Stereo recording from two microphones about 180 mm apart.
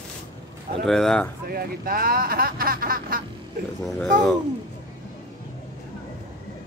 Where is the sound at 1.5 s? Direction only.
55° right (ahead or behind).